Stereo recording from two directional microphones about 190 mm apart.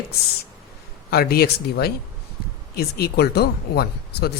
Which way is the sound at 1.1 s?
55° left (ahead or behind).